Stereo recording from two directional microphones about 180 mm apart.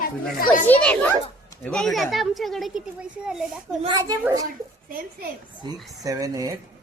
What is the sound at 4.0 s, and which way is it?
Speech, 15° right (ahead or behind).